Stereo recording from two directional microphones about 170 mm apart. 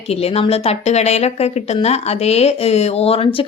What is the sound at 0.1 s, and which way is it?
A woman's voice, 35° left (ahead or behind).